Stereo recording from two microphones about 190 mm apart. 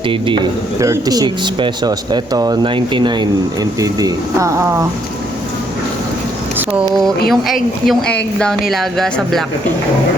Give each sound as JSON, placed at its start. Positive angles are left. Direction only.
{"t": 0.8, "sound": "speech", "side_deg": -20}
{"t": 6.6, "sound": "a sound", "side_deg": -10}
{"t": 7.3, "sound": "speech", "side_deg": 0}